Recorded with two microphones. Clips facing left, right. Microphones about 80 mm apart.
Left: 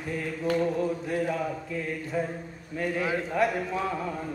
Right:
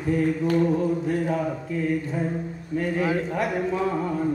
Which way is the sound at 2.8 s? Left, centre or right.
Right.